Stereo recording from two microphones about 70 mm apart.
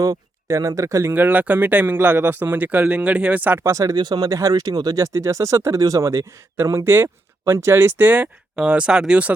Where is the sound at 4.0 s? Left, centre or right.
Right.